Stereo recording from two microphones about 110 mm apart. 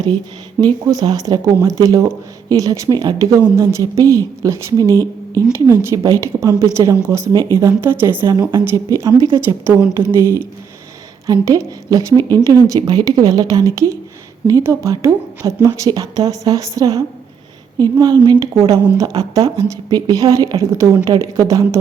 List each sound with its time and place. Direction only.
0.6 s a woman's voice: 35° right (ahead or behind)
9.6 s a woman's voice: 20° right (ahead or behind)